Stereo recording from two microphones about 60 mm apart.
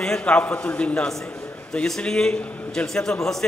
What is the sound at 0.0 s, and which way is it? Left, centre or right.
A man's voice, centre.